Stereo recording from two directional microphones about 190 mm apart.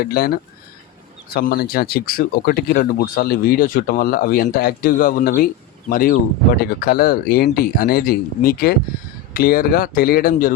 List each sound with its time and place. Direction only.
0.0 s speech: 50° left (ahead or behind)